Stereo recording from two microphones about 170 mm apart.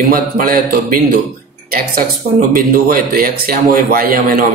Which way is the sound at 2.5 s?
60° right (ahead or behind).